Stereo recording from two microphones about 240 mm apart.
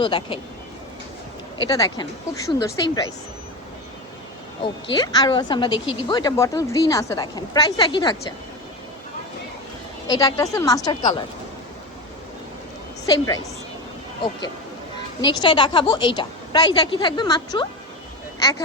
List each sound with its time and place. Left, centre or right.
0.0 s a woman's voice: left
1.6 s speech: centre
4.6 s a woman's voice: centre
10.1 s speech: centre
13.1 s speech: centre
15.2 s a woman's voice: centre